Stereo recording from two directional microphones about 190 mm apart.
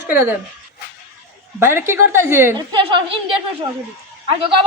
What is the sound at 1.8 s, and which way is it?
Speech, 15° right (ahead or behind).